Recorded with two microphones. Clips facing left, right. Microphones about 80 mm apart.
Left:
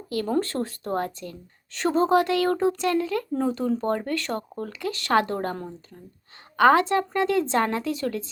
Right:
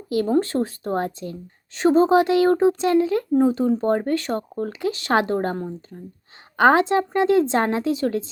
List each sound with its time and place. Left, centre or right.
0.3 s a woman's voice: centre
6.6 s a woman's voice: right